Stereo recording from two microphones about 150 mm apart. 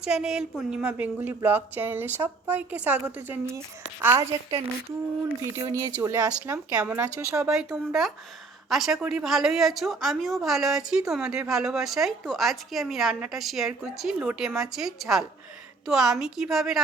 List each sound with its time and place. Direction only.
0.0 s a woman's voice: 5° right (ahead or behind)
5.4 s speech: 15° right (ahead or behind)
7.5 s a woman's voice: centre (ahead or behind)